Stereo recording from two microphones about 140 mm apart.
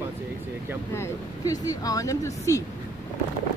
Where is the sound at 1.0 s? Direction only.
25° left (ahead or behind).